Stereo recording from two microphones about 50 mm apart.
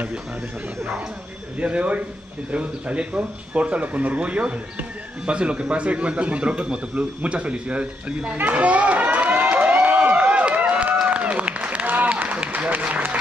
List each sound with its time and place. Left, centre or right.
1.6 s speech: right
7.2 s a sound: right
11.1 s applause: right